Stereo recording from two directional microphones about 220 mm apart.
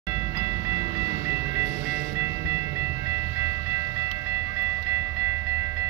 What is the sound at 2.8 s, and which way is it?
Train, 10° right (ahead or behind).